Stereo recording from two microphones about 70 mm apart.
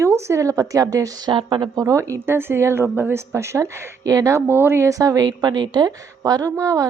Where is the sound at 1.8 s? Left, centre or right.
Right.